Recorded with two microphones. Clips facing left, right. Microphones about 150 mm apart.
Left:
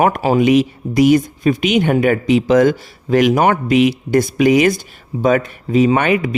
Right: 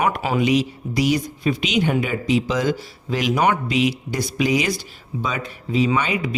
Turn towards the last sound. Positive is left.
turn(degrees=55)  # may be behind; listen again after turning